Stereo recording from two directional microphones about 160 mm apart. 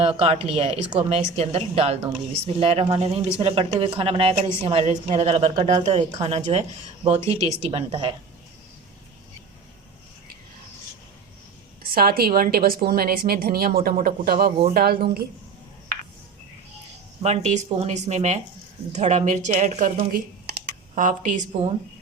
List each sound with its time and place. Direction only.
0.0 s a woman's voice: 35° right (ahead or behind)
11.8 s speech: 70° right (ahead or behind)
17.2 s speech: 45° right (ahead or behind); by 20.7 s 70° right (ahead or behind)
20.9 s speech: 50° right (ahead or behind)